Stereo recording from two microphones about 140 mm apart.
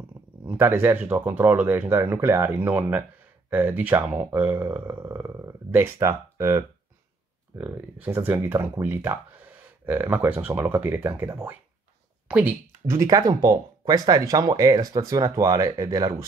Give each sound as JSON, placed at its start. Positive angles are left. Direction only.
{"t": 0.5, "sound": "speech", "side_deg": -15}
{"t": 12.8, "sound": "speech", "side_deg": -25}